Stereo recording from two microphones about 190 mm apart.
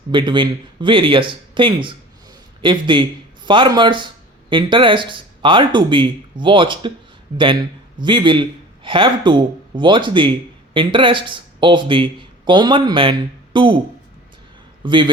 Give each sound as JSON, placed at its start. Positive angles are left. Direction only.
{"t": 0.1, "sound": "a man's voice", "side_deg": -25}
{"t": 14.8, "sound": "speech", "side_deg": -25}